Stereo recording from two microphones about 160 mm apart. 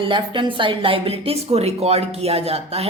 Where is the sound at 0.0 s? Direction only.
30° right (ahead or behind).